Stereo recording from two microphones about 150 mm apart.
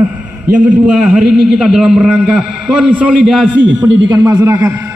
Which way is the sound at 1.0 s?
5° right (ahead or behind).